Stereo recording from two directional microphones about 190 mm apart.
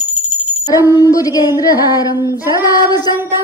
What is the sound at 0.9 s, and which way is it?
Speech, 20° left (ahead or behind).